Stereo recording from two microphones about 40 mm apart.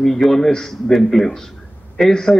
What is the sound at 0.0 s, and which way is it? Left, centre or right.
A man's voice, centre.